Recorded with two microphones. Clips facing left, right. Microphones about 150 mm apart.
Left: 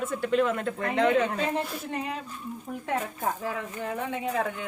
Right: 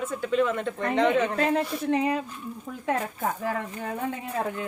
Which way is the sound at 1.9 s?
90° right.